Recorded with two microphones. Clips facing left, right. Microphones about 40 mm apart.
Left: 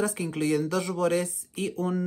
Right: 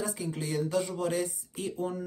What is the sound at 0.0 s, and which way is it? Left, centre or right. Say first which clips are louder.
Speech: left 7 dB; left.